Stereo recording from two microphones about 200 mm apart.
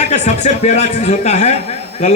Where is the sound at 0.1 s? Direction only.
35° left (ahead or behind).